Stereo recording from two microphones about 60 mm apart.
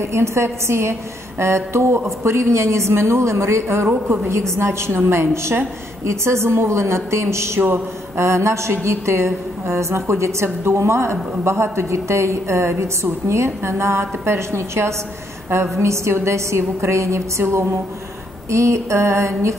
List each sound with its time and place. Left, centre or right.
0.0 s a woman's voice: right